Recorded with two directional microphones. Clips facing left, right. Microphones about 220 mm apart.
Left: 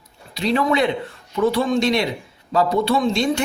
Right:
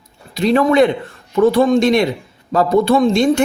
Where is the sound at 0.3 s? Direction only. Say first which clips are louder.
Right 7 dB; 50° right (ahead or behind).